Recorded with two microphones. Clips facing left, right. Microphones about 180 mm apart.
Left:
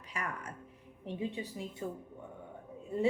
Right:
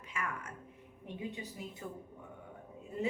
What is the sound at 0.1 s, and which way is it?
A woman's voice, 35° left (ahead or behind).